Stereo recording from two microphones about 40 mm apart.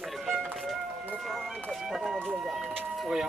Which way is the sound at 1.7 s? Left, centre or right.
Centre.